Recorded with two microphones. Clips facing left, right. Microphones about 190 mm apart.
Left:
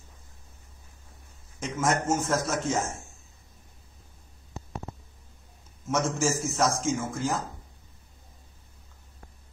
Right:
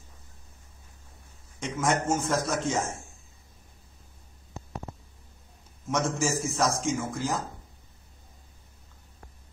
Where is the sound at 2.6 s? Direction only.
30° right (ahead or behind).